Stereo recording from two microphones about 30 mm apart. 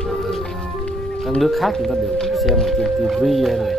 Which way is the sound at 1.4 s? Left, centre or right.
Centre.